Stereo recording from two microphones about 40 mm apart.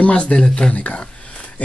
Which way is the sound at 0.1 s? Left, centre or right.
Left.